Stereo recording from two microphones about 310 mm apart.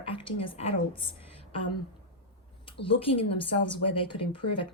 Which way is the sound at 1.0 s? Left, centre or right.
Centre.